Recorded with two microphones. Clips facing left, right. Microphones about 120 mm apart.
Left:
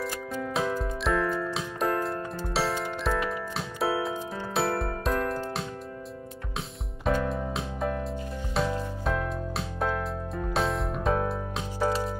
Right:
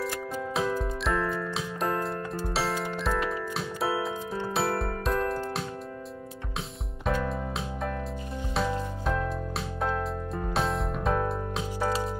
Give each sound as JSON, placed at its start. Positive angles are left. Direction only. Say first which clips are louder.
{"t": 0.0, "sound": "music", "louder": "even", "side_deg": -5}
{"t": 7.1, "sound": "music", "louder": "left 2 dB", "side_deg": 0}